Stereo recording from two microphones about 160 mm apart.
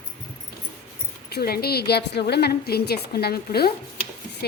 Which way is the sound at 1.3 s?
75° left (ahead or behind).